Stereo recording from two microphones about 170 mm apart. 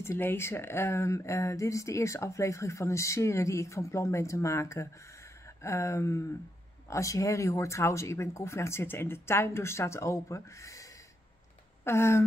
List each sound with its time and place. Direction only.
0.0 s speech: 15° left (ahead or behind)
11.8 s speech: 15° left (ahead or behind)